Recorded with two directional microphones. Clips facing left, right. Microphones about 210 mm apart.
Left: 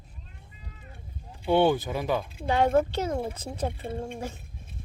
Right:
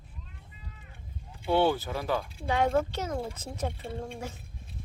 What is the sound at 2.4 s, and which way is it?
Speech, 30° left (ahead or behind).